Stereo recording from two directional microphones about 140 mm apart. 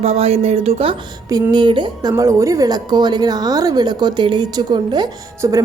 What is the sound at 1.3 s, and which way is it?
A woman's voice, 30° right (ahead or behind).